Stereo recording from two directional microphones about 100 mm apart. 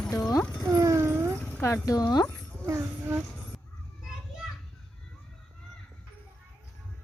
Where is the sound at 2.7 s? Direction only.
25° right (ahead or behind).